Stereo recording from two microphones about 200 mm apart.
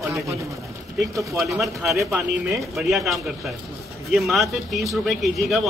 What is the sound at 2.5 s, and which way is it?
A man's voice, centre (ahead or behind).